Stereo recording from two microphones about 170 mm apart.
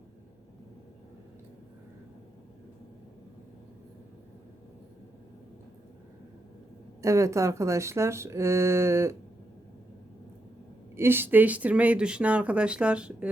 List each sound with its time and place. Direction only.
7.0 s speech: 20° right (ahead or behind)
10.9 s speech: 15° right (ahead or behind)